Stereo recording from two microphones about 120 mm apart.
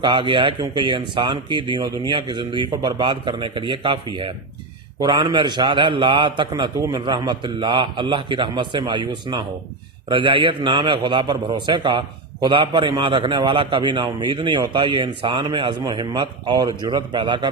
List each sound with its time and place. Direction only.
0.0 s a man's voice: 40° right (ahead or behind)
6.5 s a man's voice: 30° right (ahead or behind)